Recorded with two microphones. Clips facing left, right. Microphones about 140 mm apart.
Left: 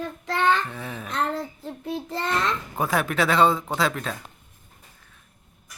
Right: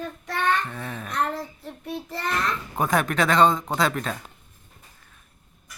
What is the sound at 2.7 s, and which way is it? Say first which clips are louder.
Speech: right 2 dB; 5° left (ahead or behind).